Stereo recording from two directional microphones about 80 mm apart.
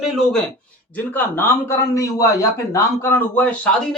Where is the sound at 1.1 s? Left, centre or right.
Left.